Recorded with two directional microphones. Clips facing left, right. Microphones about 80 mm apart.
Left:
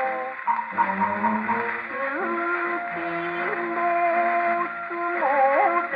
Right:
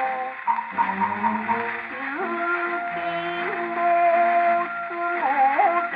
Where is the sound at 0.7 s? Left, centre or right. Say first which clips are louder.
Even; left.